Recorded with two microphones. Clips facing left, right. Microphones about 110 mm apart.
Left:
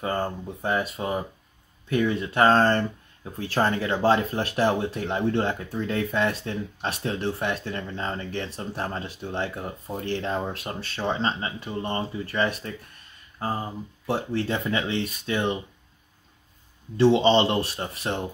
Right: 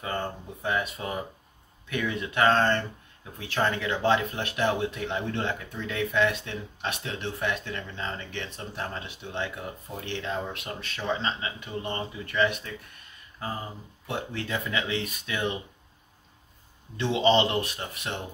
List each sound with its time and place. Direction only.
0.0 s speech: 35° left (ahead or behind)
16.9 s speech: 30° left (ahead or behind)